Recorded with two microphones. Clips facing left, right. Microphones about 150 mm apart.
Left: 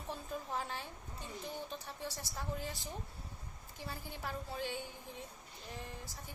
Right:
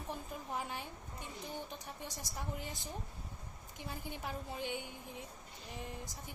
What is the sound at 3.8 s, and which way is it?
A woman's voice, 20° right (ahead or behind).